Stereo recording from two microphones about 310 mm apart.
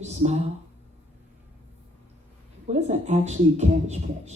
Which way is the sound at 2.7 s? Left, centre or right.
Right.